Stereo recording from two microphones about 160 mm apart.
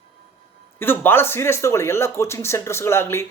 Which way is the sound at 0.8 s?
15° left (ahead or behind).